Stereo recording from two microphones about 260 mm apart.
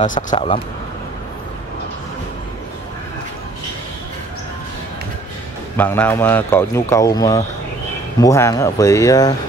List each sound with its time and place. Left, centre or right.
0.0 s speech: left
5.8 s speech: centre